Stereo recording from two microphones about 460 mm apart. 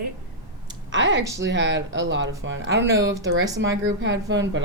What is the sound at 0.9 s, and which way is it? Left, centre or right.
Speech, right.